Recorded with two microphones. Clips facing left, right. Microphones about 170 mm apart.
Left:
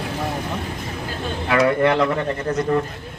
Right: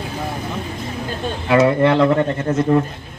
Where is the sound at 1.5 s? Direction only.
25° right (ahead or behind).